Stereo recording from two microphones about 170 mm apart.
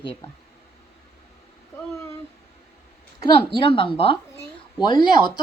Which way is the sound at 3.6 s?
30° left (ahead or behind).